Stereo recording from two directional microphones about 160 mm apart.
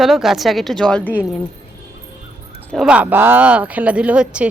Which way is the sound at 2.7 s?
5° right (ahead or behind).